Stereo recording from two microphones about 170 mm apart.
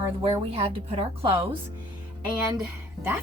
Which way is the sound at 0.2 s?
35° right (ahead or behind).